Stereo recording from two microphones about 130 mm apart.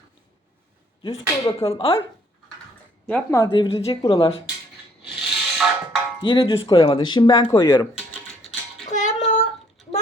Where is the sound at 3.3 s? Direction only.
25° left (ahead or behind).